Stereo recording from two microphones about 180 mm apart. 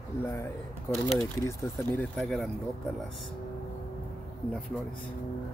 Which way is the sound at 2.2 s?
Centre (ahead or behind).